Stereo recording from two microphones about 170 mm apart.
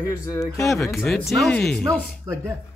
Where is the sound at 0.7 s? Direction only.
5° left (ahead or behind).